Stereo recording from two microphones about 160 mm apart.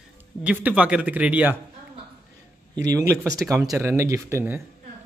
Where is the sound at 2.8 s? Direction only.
20° right (ahead or behind).